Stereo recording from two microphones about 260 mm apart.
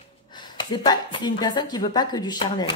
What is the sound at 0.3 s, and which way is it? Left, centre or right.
Speech, centre.